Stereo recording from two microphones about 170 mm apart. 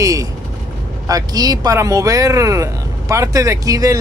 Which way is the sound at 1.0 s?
20° right (ahead or behind).